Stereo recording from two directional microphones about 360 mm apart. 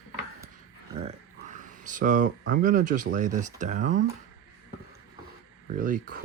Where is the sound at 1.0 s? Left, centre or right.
Centre.